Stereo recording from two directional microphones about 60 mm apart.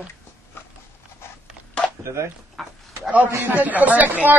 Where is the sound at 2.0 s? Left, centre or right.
Right.